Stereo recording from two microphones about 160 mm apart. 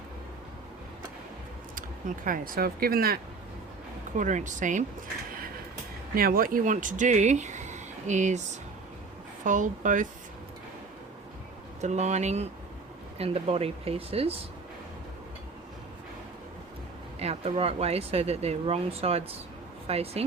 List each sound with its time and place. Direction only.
1.7 s speech: 60° right (ahead or behind)
4.2 s speech: 50° right (ahead or behind)
6.1 s speech: 65° right (ahead or behind); by 8.4 s 50° right (ahead or behind)
9.4 s speech: 55° right (ahead or behind)
11.8 s speech: 45° right (ahead or behind)
17.2 s speech: 40° right (ahead or behind)